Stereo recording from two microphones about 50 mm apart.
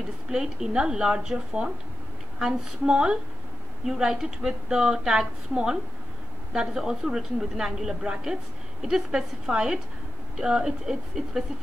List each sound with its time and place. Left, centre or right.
0.3 s a woman's voice: centre
2.8 s a woman's voice: centre